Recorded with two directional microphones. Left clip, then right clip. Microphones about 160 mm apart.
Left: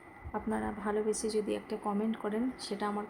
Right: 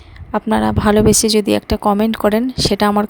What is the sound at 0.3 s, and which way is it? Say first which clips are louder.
Speech: right 19 dB; 90° right.